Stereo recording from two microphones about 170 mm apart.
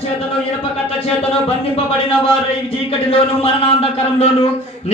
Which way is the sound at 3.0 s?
35° left (ahead or behind).